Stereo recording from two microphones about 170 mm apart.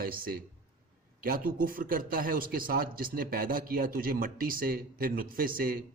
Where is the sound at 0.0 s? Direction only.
60° right (ahead or behind).